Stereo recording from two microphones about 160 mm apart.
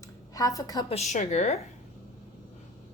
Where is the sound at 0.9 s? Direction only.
45° left (ahead or behind).